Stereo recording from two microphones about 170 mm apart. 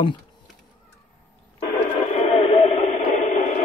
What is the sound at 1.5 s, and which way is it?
Radio, 35° left (ahead or behind).